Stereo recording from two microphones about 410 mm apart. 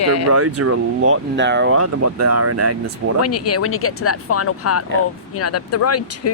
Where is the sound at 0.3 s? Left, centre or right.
Right.